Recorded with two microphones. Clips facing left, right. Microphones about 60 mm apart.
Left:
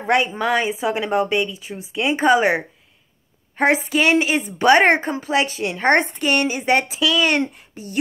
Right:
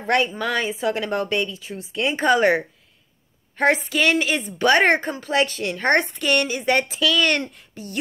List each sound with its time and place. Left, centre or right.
0.0 s a woman's voice: centre